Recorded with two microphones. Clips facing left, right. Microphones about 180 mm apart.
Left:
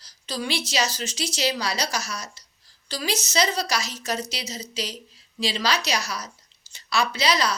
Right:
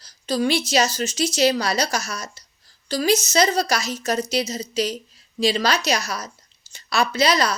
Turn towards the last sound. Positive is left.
turn(degrees=-50)  # may be behind; listen again after turning